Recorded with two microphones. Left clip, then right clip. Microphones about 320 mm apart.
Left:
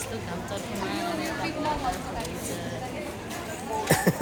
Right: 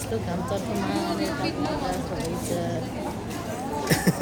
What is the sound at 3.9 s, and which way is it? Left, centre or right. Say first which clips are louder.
Music: left 2 dB; centre.